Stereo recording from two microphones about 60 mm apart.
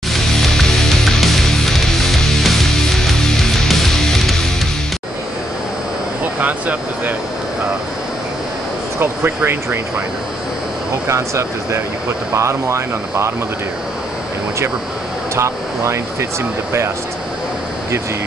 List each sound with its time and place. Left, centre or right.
0.1 s music: centre
6.4 s speech: right
9.0 s speech: right
11.1 s speech: right
15.3 s speech: right